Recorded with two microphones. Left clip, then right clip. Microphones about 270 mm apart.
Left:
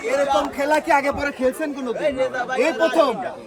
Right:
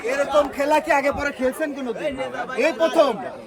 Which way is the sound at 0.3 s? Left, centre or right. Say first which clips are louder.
Right 1 dB; centre.